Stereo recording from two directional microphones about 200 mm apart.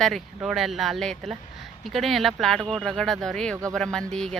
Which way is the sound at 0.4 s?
Centre (ahead or behind).